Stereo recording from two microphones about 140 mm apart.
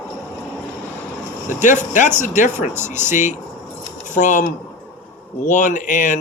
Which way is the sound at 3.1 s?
60° left (ahead or behind).